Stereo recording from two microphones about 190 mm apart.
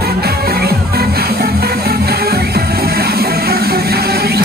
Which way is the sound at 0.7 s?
55° right (ahead or behind).